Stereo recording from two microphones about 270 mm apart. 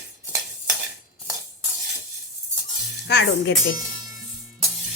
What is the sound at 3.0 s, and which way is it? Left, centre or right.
Speech, left.